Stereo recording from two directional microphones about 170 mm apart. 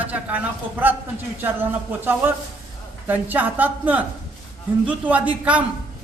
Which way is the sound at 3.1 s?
10° right (ahead or behind).